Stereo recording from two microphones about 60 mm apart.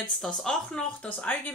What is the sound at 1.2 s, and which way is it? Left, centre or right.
Speech, left.